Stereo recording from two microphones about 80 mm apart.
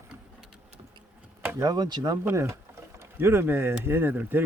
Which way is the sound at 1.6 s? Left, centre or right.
Right.